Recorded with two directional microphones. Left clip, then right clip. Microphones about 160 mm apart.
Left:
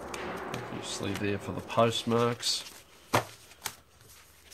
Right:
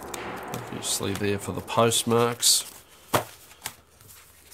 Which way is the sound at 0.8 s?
30° right (ahead or behind).